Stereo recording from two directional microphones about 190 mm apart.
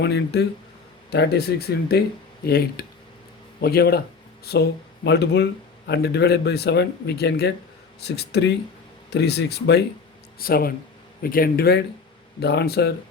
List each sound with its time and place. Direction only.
0.0 s speech: 65° left (ahead or behind)